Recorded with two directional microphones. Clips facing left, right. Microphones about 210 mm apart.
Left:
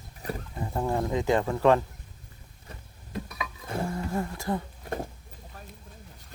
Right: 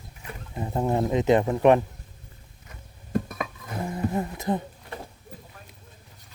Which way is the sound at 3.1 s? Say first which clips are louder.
Right 8 dB; 50° right (ahead or behind).